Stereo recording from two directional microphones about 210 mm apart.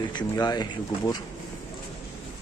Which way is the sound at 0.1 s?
20° left (ahead or behind).